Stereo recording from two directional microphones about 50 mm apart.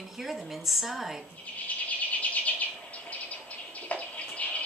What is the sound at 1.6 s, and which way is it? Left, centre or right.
Bird, left.